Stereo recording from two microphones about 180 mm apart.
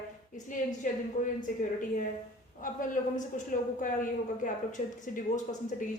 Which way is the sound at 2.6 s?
45° left (ahead or behind).